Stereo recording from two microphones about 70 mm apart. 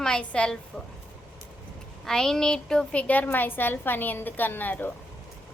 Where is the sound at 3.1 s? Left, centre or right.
Left.